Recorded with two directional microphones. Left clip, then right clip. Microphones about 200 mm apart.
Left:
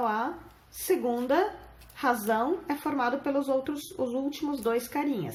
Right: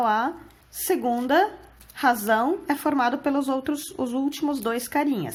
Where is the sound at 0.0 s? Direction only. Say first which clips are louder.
Right 6 dB; 50° right (ahead or behind).